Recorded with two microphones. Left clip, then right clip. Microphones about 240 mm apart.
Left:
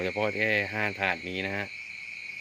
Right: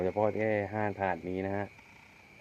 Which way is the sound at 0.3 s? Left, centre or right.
Centre.